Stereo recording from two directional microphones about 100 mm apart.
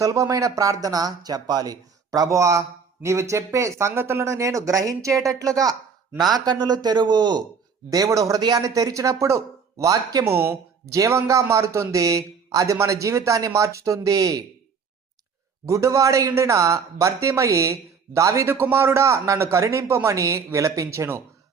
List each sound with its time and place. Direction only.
0.0 s speech: 35° right (ahead or behind)
7.9 s speech: 35° right (ahead or behind)
10.2 s speech: 25° right (ahead or behind)
15.6 s a man's voice: 30° right (ahead or behind)